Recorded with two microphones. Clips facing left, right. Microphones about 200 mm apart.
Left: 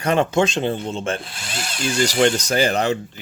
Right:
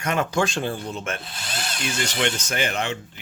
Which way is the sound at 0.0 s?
30° left (ahead or behind).